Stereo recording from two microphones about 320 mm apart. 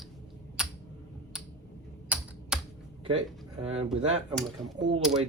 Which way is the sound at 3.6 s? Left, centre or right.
Centre.